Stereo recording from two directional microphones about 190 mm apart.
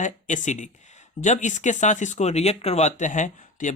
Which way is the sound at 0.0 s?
40° left (ahead or behind).